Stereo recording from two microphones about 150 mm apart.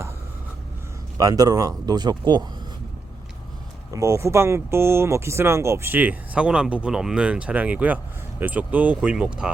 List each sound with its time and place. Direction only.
1.2 s speech: 25° right (ahead or behind)
3.9 s speech: 20° right (ahead or behind)